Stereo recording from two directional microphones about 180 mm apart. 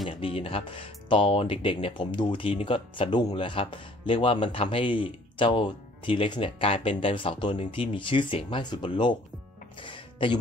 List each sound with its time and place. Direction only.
0.2 s speech: 30° left (ahead or behind)
9.8 s music: 30° left (ahead or behind)